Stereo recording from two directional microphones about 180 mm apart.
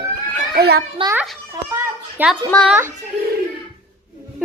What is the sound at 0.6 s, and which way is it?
Speech, 60° right (ahead or behind).